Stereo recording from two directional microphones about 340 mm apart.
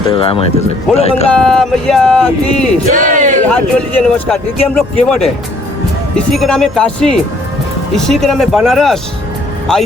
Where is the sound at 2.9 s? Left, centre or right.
Right.